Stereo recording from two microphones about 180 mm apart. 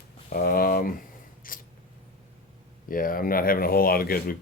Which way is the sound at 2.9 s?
50° left (ahead or behind).